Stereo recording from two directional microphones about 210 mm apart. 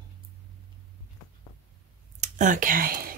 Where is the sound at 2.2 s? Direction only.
35° right (ahead or behind).